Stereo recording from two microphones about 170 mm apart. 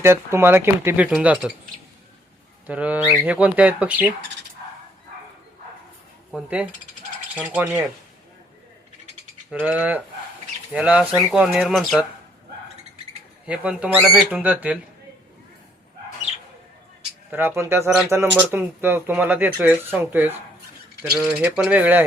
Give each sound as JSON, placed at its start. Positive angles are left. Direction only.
{"t": 0.0, "sound": "speech", "side_deg": -15}
{"t": 2.6, "sound": "speech", "side_deg": -10}
{"t": 6.3, "sound": "speech", "side_deg": -5}
{"t": 9.5, "sound": "speech", "side_deg": -5}
{"t": 13.4, "sound": "speech", "side_deg": -5}
{"t": 17.3, "sound": "speech", "side_deg": -15}